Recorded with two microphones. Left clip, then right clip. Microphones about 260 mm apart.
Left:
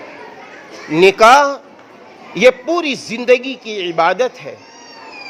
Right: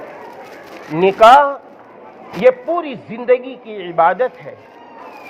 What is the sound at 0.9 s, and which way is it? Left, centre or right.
A man's voice, left.